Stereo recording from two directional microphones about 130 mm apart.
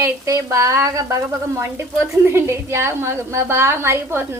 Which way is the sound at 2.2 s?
20° right (ahead or behind).